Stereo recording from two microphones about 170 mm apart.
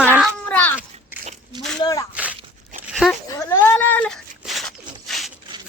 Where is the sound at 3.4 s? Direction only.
15° left (ahead or behind).